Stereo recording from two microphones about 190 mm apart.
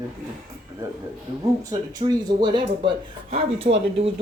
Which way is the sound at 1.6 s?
20° right (ahead or behind).